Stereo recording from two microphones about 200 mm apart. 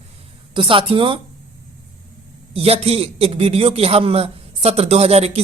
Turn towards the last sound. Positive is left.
turn(degrees=-30)  # may be behind; listen again after turning